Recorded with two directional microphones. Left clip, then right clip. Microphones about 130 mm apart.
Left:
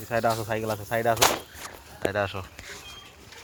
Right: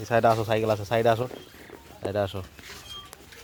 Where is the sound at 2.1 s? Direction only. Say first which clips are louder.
Even; 45° right (ahead or behind).